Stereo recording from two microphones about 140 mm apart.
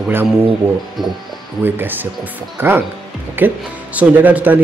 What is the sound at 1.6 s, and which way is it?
Speech, 15° right (ahead or behind).